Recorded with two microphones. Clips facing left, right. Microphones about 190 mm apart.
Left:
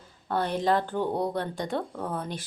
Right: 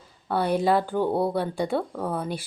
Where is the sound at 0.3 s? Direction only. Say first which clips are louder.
Right 3 dB; 10° right (ahead or behind).